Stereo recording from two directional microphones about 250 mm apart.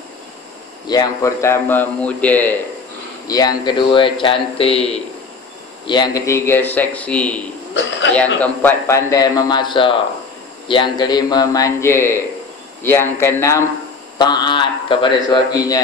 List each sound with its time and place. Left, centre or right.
0.8 s a man's voice: centre
7.8 s a sound: left
8.1 s a man's voice: centre